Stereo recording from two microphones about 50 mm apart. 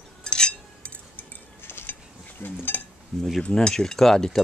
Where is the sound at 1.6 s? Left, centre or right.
Left.